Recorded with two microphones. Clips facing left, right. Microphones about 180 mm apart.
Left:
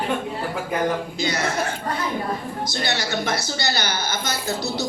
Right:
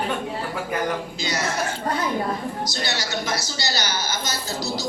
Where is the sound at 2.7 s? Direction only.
55° left (ahead or behind).